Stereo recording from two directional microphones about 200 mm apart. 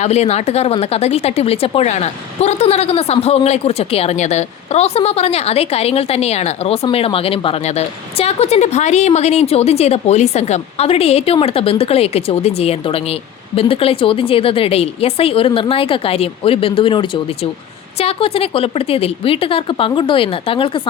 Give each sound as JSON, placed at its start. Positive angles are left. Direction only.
{"t": 0.0, "sound": "a woman's voice", "side_deg": 30}